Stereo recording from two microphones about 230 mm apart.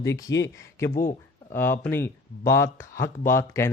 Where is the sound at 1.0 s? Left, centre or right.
Left.